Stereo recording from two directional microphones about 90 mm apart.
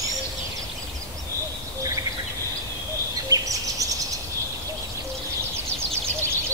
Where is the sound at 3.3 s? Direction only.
40° right (ahead or behind).